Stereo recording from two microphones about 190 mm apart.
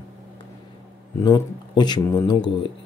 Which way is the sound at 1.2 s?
20° left (ahead or behind).